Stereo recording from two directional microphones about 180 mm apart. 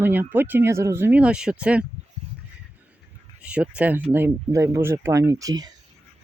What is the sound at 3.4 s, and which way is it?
Speech, 5° right (ahead or behind).